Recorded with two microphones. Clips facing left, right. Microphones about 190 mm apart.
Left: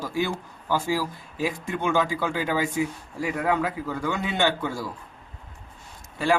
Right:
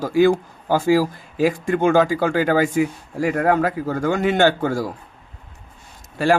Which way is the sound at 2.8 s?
65° right (ahead or behind).